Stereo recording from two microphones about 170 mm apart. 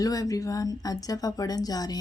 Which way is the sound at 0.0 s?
20° left (ahead or behind).